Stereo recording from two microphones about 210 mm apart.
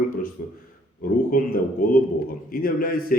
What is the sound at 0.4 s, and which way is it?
A man's voice, 45° left (ahead or behind).